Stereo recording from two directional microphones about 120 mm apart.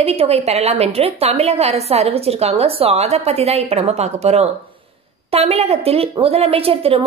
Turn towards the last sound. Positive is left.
turn(degrees=-50)  # may be behind; listen again after turning